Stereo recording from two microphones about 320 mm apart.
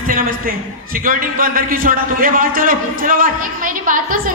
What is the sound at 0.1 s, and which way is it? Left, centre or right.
A man's voice, right.